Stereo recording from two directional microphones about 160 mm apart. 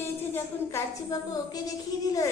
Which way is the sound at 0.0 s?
15° left (ahead or behind).